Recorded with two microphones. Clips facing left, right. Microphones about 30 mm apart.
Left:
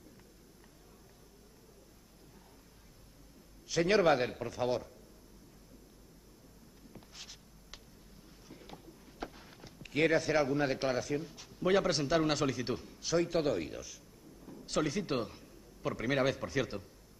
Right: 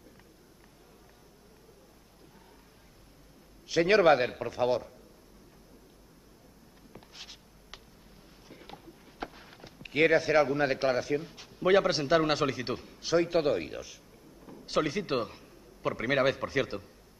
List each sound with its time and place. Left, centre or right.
3.6 s a man's voice: right
6.9 s a sound: right
8.5 s a man's voice: right